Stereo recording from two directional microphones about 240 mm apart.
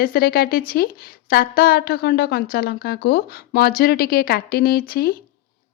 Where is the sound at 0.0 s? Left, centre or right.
Left.